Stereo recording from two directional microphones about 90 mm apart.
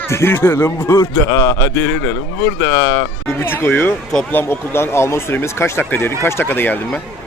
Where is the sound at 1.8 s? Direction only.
25° left (ahead or behind).